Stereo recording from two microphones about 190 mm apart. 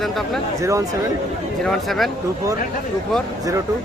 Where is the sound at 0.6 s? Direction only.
15° right (ahead or behind).